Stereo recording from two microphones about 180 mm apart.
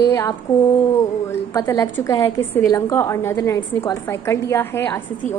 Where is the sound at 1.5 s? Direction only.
15° left (ahead or behind).